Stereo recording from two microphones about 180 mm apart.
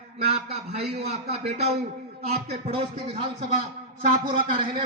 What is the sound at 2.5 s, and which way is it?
Speech, 35° right (ahead or behind).